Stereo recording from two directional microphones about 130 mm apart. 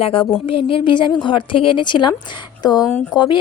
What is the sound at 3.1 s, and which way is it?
Speech, 35° left (ahead or behind).